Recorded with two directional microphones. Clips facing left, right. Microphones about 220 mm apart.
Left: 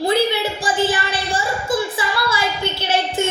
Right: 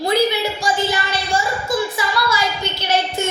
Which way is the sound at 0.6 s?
30° left (ahead or behind).